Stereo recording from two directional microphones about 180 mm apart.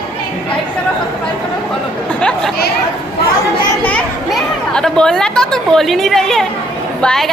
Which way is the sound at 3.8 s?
5° left (ahead or behind).